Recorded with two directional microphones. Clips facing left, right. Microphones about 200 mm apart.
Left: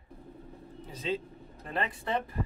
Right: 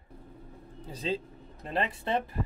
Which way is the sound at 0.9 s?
30° right (ahead or behind).